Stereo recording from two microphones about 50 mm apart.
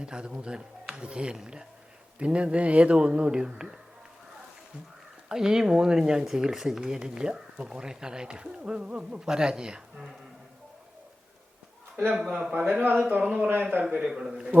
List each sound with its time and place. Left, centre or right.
0.0 s speech: centre
5.3 s speech: centre
12.1 s speech: centre
12.7 s a man's voice: right
14.0 s speech: centre